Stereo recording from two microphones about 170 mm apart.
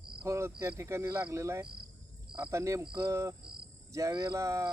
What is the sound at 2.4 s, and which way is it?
Speech, 20° right (ahead or behind).